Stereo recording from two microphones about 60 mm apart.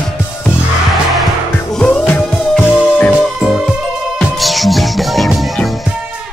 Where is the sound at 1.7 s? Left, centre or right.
Centre.